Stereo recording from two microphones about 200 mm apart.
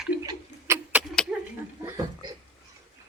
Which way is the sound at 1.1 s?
5° left (ahead or behind).